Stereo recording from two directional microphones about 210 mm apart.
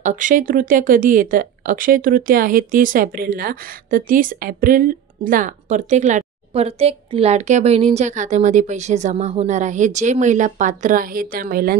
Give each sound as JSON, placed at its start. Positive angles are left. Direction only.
{"t": 0.0, "sound": "speech", "side_deg": -35}